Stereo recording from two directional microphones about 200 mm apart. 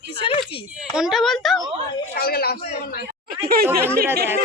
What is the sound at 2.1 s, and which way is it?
Speech, 50° left (ahead or behind).